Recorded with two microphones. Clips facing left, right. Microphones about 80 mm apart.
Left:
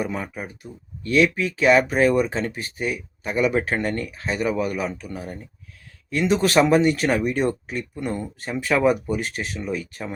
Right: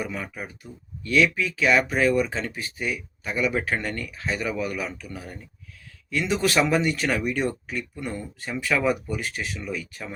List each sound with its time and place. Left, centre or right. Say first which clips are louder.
0.0 s speech: left 4 dB; left
1.0 s speech: left 2 dB; left
8.0 s speech: left 8 dB; left
8.6 s speech: left 4 dB; left